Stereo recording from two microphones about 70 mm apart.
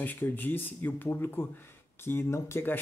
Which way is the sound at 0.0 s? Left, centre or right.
Left.